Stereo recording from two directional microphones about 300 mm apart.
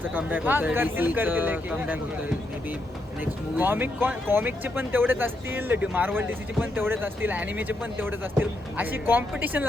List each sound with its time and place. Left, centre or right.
0.0 s speech: centre
3.2 s speech: centre